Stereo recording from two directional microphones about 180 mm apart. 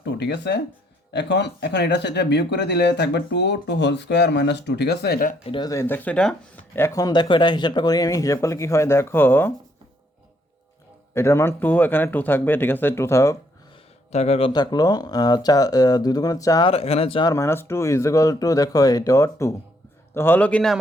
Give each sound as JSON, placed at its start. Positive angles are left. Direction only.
{"t": 0.0, "sound": "speech", "side_deg": 75}
{"t": 5.5, "sound": "speech", "side_deg": 25}
{"t": 11.1, "sound": "speech", "side_deg": 15}
{"t": 14.1, "sound": "speech", "side_deg": 35}
{"t": 16.7, "sound": "speech", "side_deg": 35}
{"t": 17.3, "sound": "speech", "side_deg": 15}